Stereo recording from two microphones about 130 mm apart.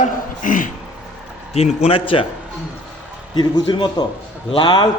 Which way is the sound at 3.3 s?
30° left (ahead or behind).